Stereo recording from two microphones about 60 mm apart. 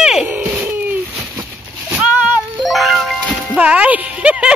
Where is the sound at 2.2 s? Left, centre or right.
Right.